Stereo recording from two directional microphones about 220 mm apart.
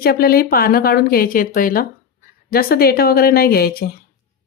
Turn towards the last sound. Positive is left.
turn(degrees=45)  # may be behind; listen again after turning